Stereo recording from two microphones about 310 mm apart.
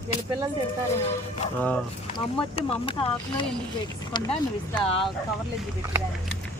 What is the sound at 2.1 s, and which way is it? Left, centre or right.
Speech, centre.